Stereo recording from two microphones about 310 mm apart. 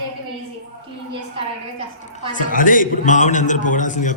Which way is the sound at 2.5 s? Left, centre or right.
Left.